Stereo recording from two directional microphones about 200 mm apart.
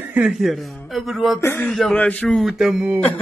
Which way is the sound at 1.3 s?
10° left (ahead or behind).